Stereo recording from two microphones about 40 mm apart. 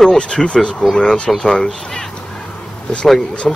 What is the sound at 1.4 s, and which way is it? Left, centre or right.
Speech, centre.